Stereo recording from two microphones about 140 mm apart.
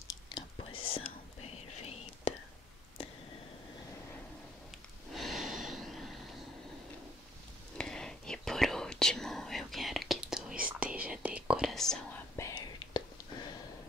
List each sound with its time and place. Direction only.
0.6 s whispering: 40° left (ahead or behind)
5.1 s gasp: centre (ahead or behind)
7.7 s whispering: 5° left (ahead or behind)
12.4 s whispering: 25° left (ahead or behind)